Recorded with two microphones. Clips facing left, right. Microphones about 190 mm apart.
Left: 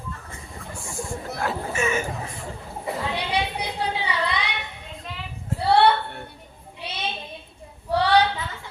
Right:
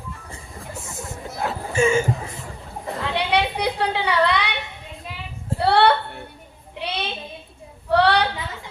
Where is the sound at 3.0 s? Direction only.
65° right (ahead or behind).